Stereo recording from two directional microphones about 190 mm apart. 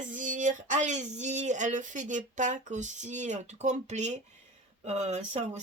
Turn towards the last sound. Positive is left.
turn(degrees=-35)  # may be behind; listen again after turning